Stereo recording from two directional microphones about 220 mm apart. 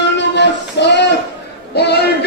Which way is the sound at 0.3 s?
50° left (ahead or behind).